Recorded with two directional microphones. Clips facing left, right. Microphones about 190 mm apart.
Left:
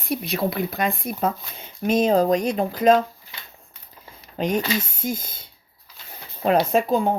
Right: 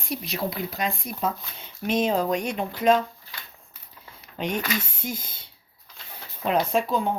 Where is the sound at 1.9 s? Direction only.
40° left (ahead or behind).